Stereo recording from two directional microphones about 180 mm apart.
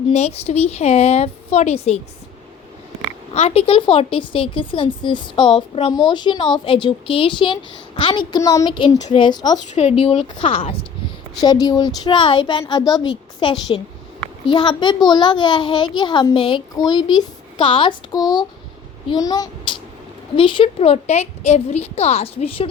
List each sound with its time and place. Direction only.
0.1 s a woman's voice: 35° left (ahead or behind)
3.3 s a woman's voice: 35° left (ahead or behind)
9.7 s a woman's voice: 35° left (ahead or behind)
11.3 s a woman's voice: 20° left (ahead or behind)